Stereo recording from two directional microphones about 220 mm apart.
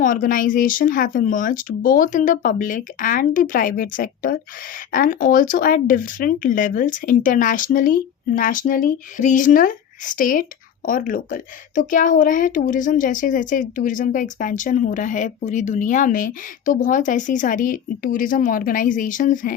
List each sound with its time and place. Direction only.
0.0 s a woman's voice: 40° left (ahead or behind)